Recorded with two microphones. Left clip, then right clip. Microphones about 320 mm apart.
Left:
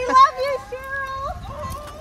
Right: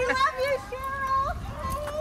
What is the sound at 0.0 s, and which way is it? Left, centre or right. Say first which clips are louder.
Children playing: left 10 dB; centre.